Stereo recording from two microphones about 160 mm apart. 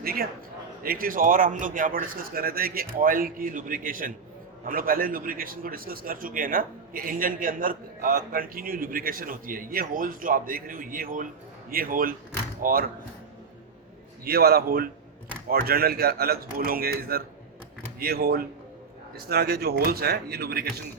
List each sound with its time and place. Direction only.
0.0 s a man's voice: 70° right (ahead or behind)
14.3 s speech: 75° right (ahead or behind)